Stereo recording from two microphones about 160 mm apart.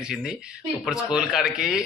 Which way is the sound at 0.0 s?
5° right (ahead or behind).